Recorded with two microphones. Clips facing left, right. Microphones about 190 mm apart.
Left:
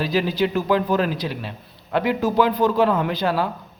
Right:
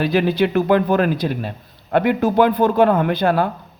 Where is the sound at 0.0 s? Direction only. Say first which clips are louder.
Right 4 dB; 60° right (ahead or behind).